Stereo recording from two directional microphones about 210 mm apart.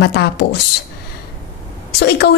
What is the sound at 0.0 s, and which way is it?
Speech, 50° left (ahead or behind).